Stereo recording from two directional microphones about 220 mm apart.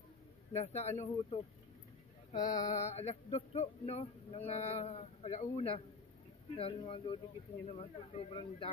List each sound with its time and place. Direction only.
0.5 s speech: 30° left (ahead or behind)
2.3 s a sound: 15° left (ahead or behind)
2.6 s speech: 30° left (ahead or behind)